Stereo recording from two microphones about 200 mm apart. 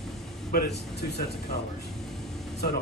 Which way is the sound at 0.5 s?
55° left (ahead or behind).